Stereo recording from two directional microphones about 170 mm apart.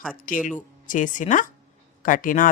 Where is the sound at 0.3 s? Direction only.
55° left (ahead or behind).